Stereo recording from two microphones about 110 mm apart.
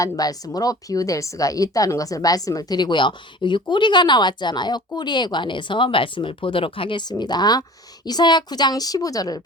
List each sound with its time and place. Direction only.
0.0 s a woman's voice: 35° left (ahead or behind)